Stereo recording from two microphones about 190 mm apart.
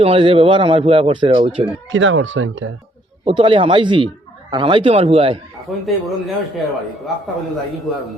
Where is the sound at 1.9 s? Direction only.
80° right.